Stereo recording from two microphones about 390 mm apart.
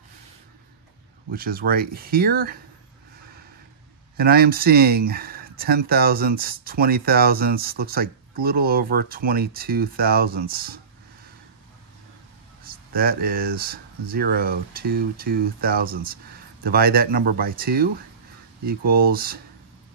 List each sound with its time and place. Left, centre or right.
1.3 s speech: right
4.2 s speech: right
12.9 s speech: right